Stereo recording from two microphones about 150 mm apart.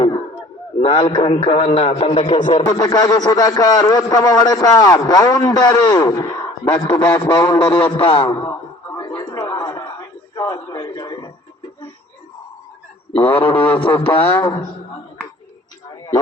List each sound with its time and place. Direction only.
0.8 s a man's voice: 45° left (ahead or behind)
1.0 s a man's voice: 30° left (ahead or behind)
7.3 s a man's voice: 25° left (ahead or behind)
8.4 s a sound: 20° left (ahead or behind)
13.1 s a man's voice: 35° left (ahead or behind)
14.3 s a man's voice: 25° left (ahead or behind)